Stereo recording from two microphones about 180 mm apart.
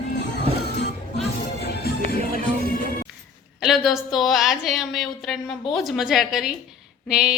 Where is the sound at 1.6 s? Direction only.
60° left (ahead or behind).